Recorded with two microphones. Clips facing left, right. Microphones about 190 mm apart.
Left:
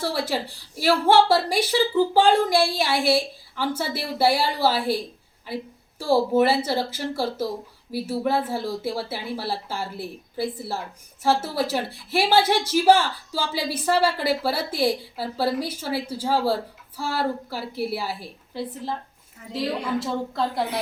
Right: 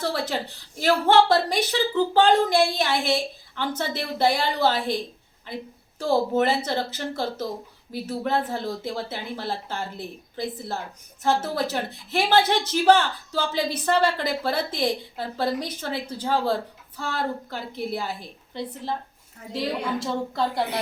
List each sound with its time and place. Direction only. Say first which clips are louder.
0.0 s speech: left 1 dB; 10° left (ahead or behind)
6.0 s a woman's voice: left 2 dB; 10° left (ahead or behind)